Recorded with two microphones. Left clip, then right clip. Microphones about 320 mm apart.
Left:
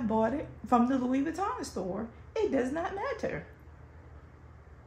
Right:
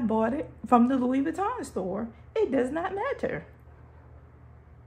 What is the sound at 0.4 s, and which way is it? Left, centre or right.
A woman's voice, right.